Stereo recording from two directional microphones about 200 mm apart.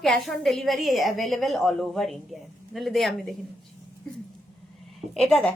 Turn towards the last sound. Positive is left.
turn(degrees=5)  # may be behind; listen again after turning